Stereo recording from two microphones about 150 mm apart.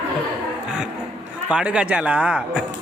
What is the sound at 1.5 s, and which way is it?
Speech, 5° right (ahead or behind).